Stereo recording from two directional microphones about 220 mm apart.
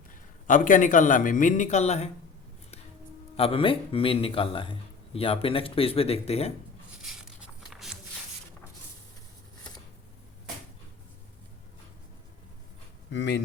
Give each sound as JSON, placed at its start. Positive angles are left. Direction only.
{"t": 0.1, "sound": "a man's voice", "side_deg": 35}
{"t": 3.3, "sound": "a man's voice", "side_deg": 25}
{"t": 6.9, "sound": "a sound", "side_deg": 0}
{"t": 13.1, "sound": "speech", "side_deg": 55}